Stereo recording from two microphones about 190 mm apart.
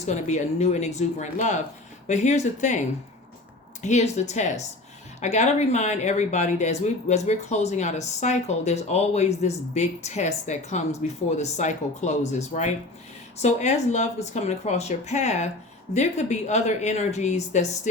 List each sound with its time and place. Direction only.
0.0 s speech: 40° left (ahead or behind)
3.8 s speech: 35° left (ahead or behind)